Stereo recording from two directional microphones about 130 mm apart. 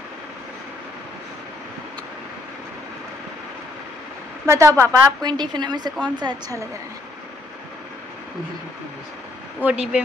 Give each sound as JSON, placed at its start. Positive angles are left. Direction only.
{"t": 4.5, "sound": "a woman's voice", "side_deg": -20}
{"t": 9.6, "sound": "speech", "side_deg": -10}